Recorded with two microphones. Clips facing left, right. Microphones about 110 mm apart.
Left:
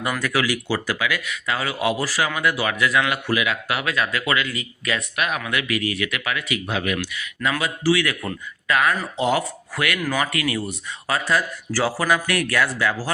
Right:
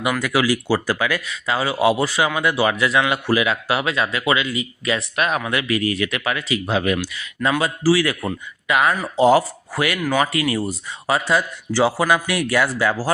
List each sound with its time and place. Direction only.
0.2 s a man's voice: 25° right (ahead or behind)
8.3 s speech: 20° right (ahead or behind)
9.1 s speech: 35° right (ahead or behind)